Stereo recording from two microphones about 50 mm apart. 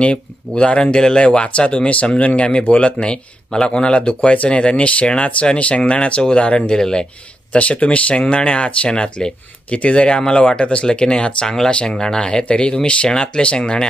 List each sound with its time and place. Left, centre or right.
0.0 s speech: left
7.5 s speech: left